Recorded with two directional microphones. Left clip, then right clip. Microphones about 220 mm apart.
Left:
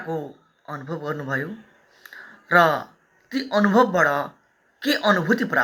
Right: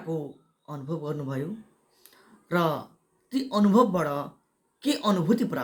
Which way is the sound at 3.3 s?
30° right (ahead or behind).